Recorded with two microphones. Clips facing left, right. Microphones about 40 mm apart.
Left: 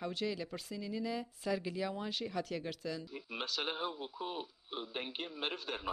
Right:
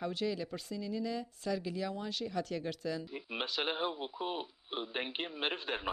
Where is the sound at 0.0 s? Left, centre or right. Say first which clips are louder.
Right 2 dB; centre.